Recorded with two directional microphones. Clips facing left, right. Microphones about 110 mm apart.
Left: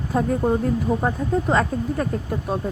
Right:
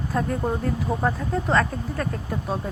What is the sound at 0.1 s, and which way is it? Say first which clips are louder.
Speech: left 5 dB; 20° left (ahead or behind).